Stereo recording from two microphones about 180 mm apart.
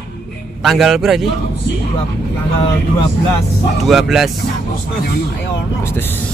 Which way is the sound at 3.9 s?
Centre (ahead or behind).